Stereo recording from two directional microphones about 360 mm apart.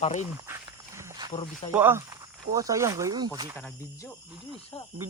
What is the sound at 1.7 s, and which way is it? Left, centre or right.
Speech, centre.